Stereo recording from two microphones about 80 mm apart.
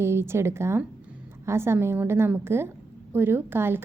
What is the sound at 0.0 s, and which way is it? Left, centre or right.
A woman's voice, right.